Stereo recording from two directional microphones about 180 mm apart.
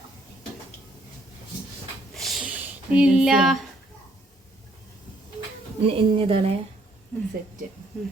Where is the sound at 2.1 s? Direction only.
Centre (ahead or behind).